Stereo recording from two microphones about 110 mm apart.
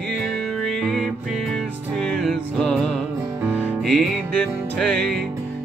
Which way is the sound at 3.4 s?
15° right (ahead or behind).